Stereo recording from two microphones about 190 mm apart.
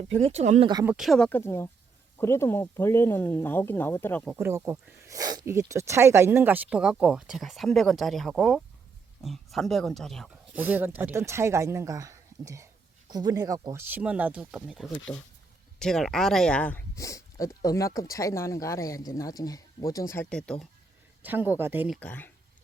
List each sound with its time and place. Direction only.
0.2 s speech: 35° right (ahead or behind)
0.9 s speech: centre (ahead or behind)
4.4 s speech: 15° right (ahead or behind)
10.5 s speech: 10° right (ahead or behind)
21.2 s speech: 10° right (ahead or behind)
21.9 s speech: 10° left (ahead or behind)